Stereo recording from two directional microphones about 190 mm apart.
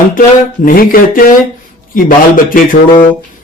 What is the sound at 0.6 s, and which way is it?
Speech, 50° left (ahead or behind).